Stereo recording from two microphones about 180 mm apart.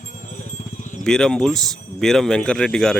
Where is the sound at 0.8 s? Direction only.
45° left (ahead or behind).